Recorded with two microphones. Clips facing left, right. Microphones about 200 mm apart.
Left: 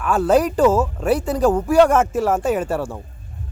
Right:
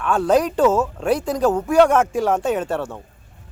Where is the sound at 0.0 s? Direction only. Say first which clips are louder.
Left 1 dB; 5° left (ahead or behind).